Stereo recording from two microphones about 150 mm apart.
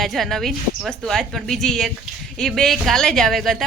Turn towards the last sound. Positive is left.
turn(degrees=0)  # may be behind; listen again after turning